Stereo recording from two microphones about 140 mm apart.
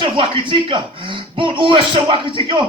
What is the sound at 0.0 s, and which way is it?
A man's voice, 35° right (ahead or behind).